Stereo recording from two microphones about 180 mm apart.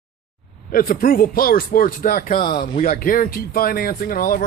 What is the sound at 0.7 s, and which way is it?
Speech, 50° left (ahead or behind).